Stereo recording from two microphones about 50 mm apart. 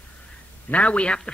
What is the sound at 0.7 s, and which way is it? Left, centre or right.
Speech, left.